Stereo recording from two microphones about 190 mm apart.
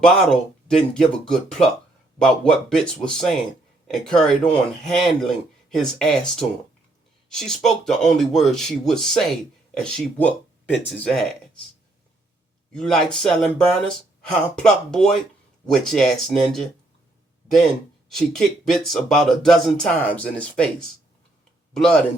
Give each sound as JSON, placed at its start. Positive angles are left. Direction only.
{"t": 0.0, "sound": "speech", "side_deg": 5}
{"t": 12.7, "sound": "speech", "side_deg": 5}
{"t": 18.1, "sound": "speech", "side_deg": 0}